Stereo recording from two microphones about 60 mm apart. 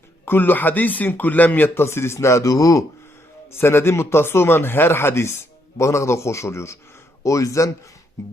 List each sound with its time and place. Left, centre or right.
0.3 s speech: left
1.8 s a man's voice: left
3.5 s speech: left
5.7 s a man's voice: left
7.3 s speech: left